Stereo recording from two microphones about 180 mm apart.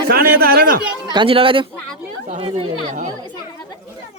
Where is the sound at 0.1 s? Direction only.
55° right (ahead or behind).